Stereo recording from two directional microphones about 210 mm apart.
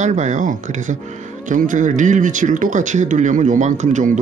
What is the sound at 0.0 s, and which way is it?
Speech, 35° right (ahead or behind).